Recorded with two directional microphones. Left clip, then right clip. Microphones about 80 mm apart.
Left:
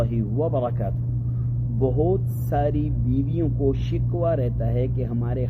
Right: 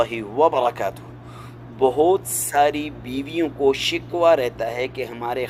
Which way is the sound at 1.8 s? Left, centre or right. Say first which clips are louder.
Right 7 dB; right.